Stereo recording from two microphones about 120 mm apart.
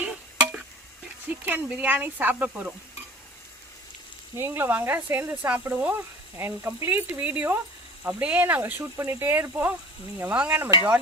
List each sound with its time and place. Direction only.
0.0 s a sound: 10° right (ahead or behind)
1.3 s speech: 15° right (ahead or behind)
4.4 s speech: 20° right (ahead or behind)